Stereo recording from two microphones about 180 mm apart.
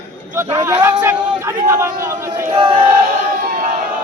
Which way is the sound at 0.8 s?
10° right (ahead or behind).